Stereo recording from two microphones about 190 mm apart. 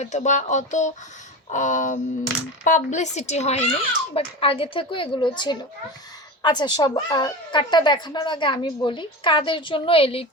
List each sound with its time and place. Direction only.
0.0 s a woman's voice: 35° left (ahead or behind)